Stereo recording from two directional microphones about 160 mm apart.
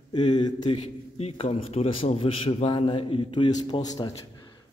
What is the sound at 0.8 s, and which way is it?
Speech, 40° left (ahead or behind).